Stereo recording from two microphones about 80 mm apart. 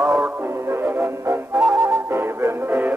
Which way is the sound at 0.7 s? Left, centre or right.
Right.